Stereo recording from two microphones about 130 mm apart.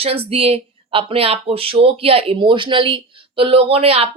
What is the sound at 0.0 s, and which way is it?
Speech, 45° right (ahead or behind).